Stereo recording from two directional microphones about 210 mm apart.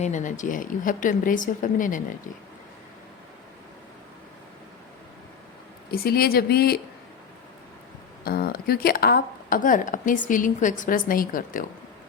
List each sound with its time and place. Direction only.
0.0 s speech: 35° left (ahead or behind)
5.9 s speech: 45° left (ahead or behind)
8.2 s speech: 45° left (ahead or behind)